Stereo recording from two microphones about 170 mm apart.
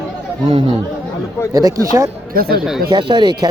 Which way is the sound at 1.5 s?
20° right (ahead or behind).